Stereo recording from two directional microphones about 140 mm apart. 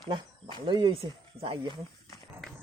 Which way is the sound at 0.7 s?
35° right (ahead or behind).